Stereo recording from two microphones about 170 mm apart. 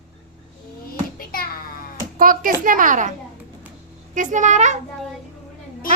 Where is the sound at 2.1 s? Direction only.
55° right (ahead or behind).